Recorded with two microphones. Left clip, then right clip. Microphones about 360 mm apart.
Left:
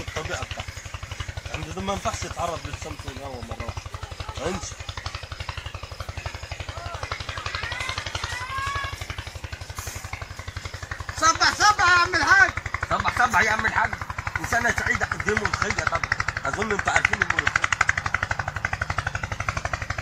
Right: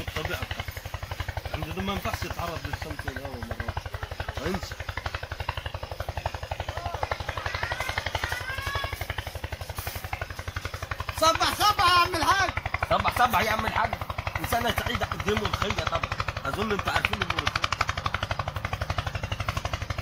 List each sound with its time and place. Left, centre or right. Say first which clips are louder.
11.1 s a sound: left 3 dB; centre
12.9 s speech: left 2 dB; centre
14.5 s vehicle: left 5 dB; centre